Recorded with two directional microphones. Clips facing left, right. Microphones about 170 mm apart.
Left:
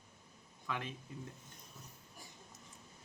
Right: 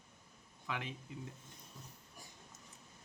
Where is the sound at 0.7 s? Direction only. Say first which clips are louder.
Left 1 dB; 20° right (ahead or behind).